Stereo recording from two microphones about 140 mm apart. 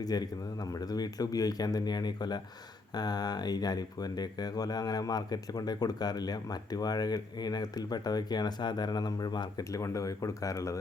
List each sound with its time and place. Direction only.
0.0 s speech: 30° left (ahead or behind)